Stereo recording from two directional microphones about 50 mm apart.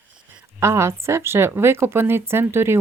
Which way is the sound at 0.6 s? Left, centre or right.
Right.